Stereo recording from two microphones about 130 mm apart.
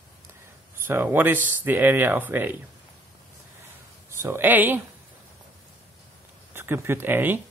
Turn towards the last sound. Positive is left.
turn(degrees=-15)  # may be behind; listen again after turning